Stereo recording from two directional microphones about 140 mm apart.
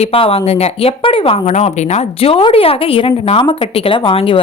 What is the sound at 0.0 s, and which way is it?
A woman's voice, 40° left (ahead or behind).